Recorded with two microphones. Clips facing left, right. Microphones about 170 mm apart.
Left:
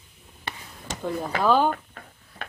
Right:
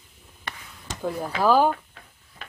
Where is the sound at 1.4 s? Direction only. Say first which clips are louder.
Right 2 dB; 5° right (ahead or behind).